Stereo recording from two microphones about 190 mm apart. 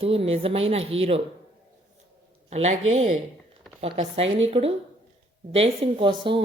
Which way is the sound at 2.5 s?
35° right (ahead or behind).